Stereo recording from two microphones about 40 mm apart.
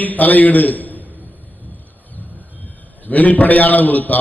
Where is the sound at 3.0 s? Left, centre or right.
Left.